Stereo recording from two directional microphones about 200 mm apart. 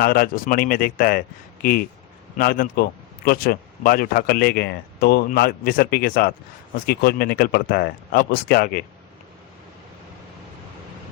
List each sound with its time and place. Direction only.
0.0 s a man's voice: 45° left (ahead or behind)